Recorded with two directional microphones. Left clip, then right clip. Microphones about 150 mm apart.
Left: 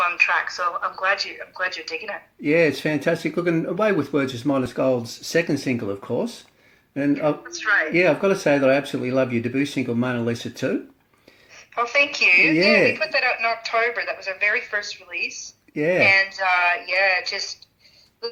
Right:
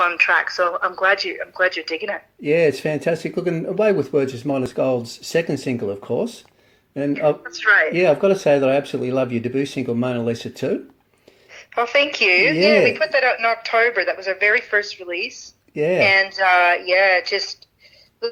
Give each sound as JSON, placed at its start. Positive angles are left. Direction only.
{"t": 0.0, "sound": "a woman's voice", "side_deg": -40}
{"t": 2.4, "sound": "speech", "side_deg": -25}
{"t": 7.4, "sound": "a woman's voice", "side_deg": -45}
{"t": 7.9, "sound": "speech", "side_deg": -20}
{"t": 11.5, "sound": "a woman's voice", "side_deg": -40}
{"t": 15.7, "sound": "speech", "side_deg": -25}
{"t": 16.0, "sound": "a woman's voice", "side_deg": -45}